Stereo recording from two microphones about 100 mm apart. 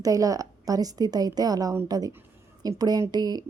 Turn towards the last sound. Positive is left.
turn(degrees=-40)  # may be behind; listen again after turning